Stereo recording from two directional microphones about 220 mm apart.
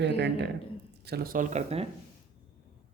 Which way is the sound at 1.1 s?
40° right (ahead or behind).